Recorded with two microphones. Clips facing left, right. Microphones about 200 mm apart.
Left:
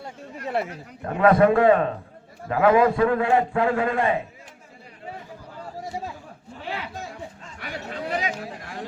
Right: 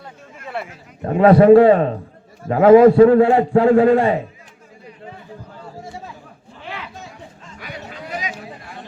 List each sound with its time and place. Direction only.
0.3 s chatter: 40° left (ahead or behind)
1.0 s a man's voice: 30° right (ahead or behind)